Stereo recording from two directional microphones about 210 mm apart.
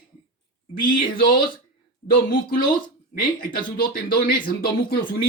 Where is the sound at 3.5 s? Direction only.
45° left (ahead or behind).